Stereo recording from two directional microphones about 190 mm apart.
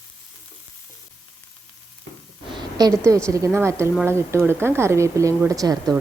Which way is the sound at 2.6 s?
20° right (ahead or behind).